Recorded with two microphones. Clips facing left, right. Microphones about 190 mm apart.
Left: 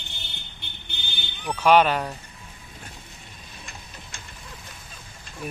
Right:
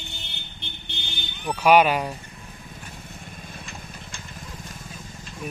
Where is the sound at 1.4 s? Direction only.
10° right (ahead or behind).